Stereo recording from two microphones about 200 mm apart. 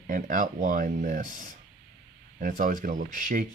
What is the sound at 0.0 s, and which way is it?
Speech, 40° right (ahead or behind).